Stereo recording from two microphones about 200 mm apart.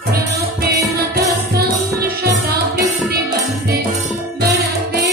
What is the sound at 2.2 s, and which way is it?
Music, 50° right (ahead or behind).